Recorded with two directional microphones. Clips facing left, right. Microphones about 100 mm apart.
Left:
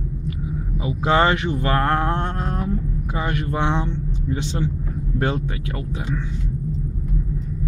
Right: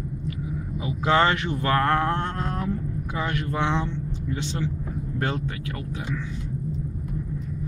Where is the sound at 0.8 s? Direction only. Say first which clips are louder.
Left 3 dB; 15° left (ahead or behind).